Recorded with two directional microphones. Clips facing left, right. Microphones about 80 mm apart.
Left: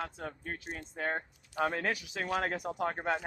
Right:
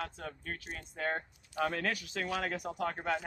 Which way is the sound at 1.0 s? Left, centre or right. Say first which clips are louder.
Even; centre.